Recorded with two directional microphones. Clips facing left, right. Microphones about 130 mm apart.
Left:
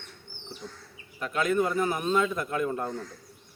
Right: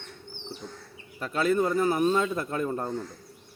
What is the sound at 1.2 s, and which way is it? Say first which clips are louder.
A man's voice: right 1 dB; 35° right (ahead or behind).